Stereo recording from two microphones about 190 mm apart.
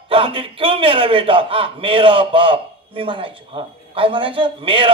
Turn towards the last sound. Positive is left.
turn(degrees=-25)  # may be behind; listen again after turning